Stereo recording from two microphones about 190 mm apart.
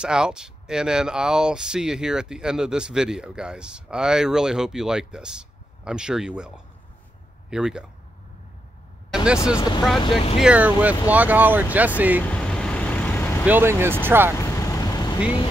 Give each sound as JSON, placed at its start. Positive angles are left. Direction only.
{"t": 0.0, "sound": "speech", "side_deg": -5}
{"t": 9.1, "sound": "speech", "side_deg": -5}
{"t": 9.6, "sound": "speech", "side_deg": 20}
{"t": 10.4, "sound": "speech", "side_deg": -5}
{"t": 12.2, "sound": "vehicle", "side_deg": 5}
{"t": 13.5, "sound": "speech", "side_deg": -10}
{"t": 14.4, "sound": "vehicle", "side_deg": 15}